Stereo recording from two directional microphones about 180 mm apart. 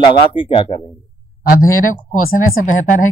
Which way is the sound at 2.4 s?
45° left (ahead or behind).